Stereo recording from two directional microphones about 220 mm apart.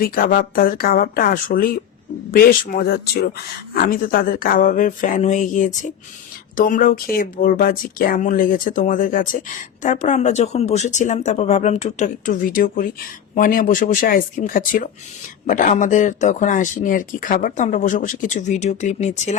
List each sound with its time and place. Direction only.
0.0 s speech: 40° left (ahead or behind)